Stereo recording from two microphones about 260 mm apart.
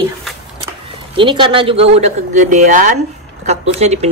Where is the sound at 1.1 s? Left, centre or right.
Centre.